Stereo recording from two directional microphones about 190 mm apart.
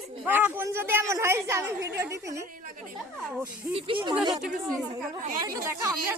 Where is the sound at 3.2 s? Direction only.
Centre (ahead or behind).